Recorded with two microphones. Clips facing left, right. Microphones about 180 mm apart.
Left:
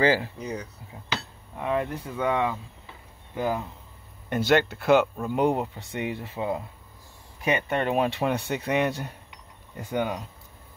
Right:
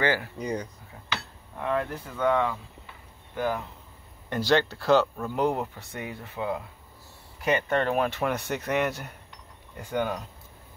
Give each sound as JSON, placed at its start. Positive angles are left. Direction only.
{"t": 0.0, "sound": "speech", "side_deg": 25}
{"t": 0.4, "sound": "speech", "side_deg": 5}